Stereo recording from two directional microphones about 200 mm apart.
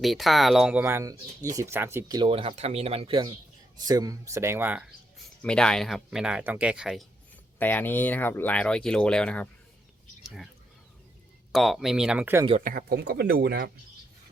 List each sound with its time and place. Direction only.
0.0 s speech: centre (ahead or behind)
5.4 s speech: 5° left (ahead or behind)
11.5 s speech: centre (ahead or behind)
12.5 s speech: 40° right (ahead or behind); by 13.7 s 55° right (ahead or behind)